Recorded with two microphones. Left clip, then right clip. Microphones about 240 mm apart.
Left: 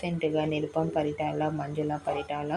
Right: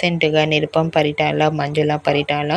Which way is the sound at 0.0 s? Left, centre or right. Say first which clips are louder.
Right 12 dB; right.